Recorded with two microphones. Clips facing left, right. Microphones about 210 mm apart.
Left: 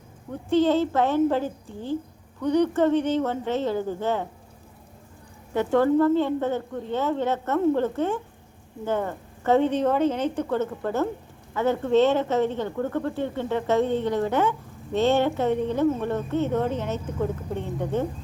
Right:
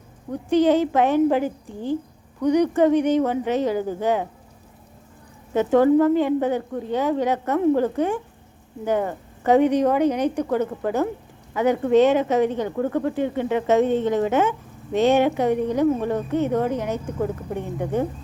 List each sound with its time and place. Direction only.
0.5 s speech: 15° right (ahead or behind)
5.5 s speech: 15° right (ahead or behind)